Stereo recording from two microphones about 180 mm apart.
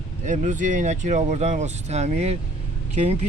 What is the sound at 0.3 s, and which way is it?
Speech, 45° right (ahead or behind).